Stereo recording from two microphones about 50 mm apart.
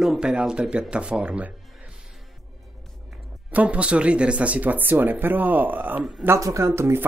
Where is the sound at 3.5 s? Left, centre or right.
Right.